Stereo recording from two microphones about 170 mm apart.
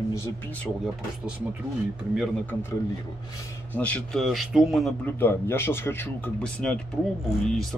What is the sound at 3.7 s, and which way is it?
Speech, 5° left (ahead or behind).